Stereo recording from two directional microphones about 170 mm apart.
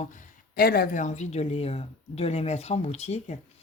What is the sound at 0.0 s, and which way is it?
Speech, 50° left (ahead or behind).